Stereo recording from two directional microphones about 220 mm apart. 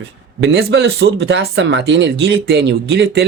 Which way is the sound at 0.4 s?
55° right (ahead or behind).